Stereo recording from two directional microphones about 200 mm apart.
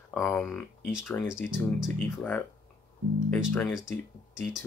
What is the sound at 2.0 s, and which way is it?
Speech, 10° left (ahead or behind).